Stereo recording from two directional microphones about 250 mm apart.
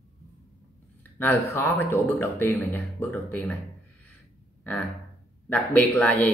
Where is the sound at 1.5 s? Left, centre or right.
Centre.